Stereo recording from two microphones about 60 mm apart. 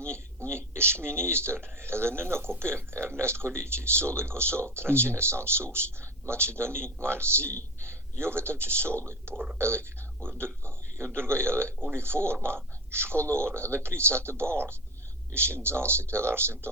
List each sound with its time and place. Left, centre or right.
0.1 s speech: right